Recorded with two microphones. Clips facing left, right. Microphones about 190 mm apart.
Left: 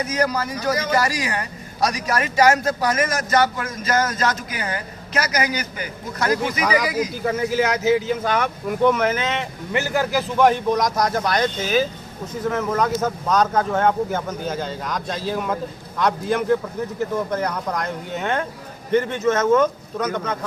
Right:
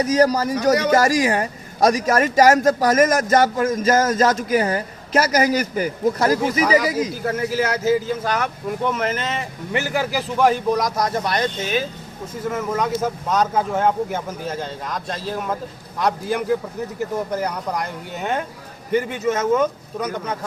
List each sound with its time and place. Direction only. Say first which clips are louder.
0.0 s a man's voice: right 5 dB; 40° right (ahead or behind)
7.1 s speech: left 1 dB; 5° right (ahead or behind)